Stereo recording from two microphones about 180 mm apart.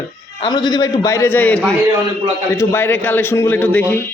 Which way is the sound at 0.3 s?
25° left (ahead or behind).